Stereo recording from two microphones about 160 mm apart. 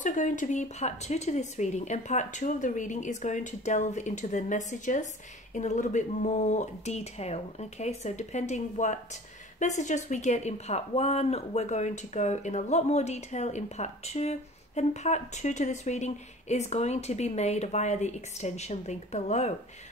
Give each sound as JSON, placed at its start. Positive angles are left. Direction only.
{"t": 0.0, "sound": "speech", "side_deg": 50}